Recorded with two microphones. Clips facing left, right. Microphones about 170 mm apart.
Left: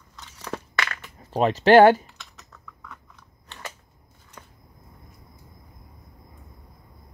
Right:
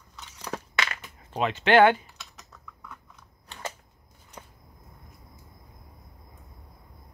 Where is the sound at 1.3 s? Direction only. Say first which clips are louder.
Left 6 dB; 35° left (ahead or behind).